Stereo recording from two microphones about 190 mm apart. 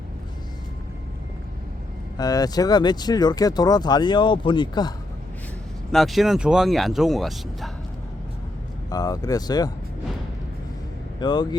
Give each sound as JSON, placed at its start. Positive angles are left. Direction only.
{"t": 2.1, "sound": "speech", "side_deg": 20}
{"t": 5.9, "sound": "speech", "side_deg": 0}
{"t": 8.9, "sound": "speech", "side_deg": 20}
{"t": 11.2, "sound": "speech", "side_deg": 25}